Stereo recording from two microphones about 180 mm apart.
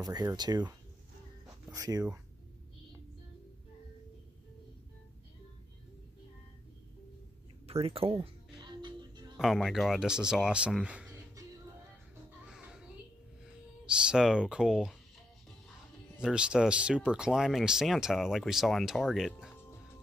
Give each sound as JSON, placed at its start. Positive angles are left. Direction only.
{"t": 0.0, "sound": "speech", "side_deg": -20}
{"t": 1.7, "sound": "speech", "side_deg": -20}
{"t": 7.6, "sound": "music", "side_deg": -30}
{"t": 9.4, "sound": "speech", "side_deg": 0}
{"t": 12.4, "sound": "music", "side_deg": -5}
{"t": 13.4, "sound": "speech", "side_deg": -5}
{"t": 16.2, "sound": "speech", "side_deg": -5}